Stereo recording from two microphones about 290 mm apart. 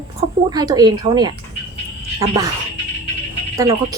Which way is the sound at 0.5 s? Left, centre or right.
Centre.